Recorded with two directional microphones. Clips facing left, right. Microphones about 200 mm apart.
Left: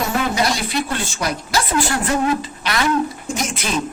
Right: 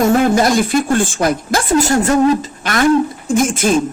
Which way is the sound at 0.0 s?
50° right (ahead or behind).